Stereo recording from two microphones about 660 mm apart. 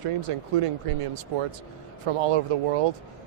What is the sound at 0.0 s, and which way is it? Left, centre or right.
Speech, right.